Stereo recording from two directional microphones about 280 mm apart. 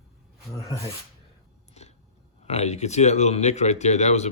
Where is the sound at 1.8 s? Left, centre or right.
Left.